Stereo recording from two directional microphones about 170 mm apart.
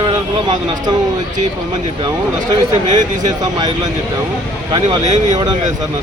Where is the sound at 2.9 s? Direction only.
25° right (ahead or behind).